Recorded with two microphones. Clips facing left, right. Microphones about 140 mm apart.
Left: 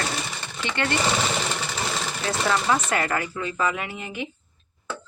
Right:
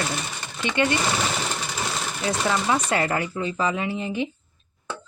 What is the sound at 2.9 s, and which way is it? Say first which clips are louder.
Speech: right 2 dB; 25° right (ahead or behind).